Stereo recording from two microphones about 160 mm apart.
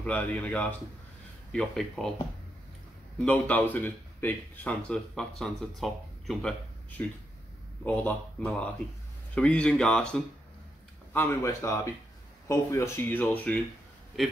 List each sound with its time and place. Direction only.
0.0 s speech: 10° left (ahead or behind)
3.3 s speech: 10° left (ahead or behind)
9.3 s speech: 10° left (ahead or behind)
11.1 s speech: 20° left (ahead or behind); by 14.3 s centre (ahead or behind)